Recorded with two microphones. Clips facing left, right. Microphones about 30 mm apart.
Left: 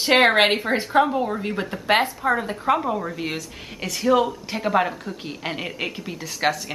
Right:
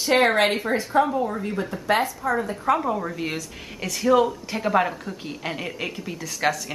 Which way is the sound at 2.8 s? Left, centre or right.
Centre.